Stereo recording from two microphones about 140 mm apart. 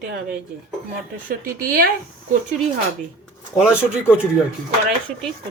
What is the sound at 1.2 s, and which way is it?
Speech, 90° right.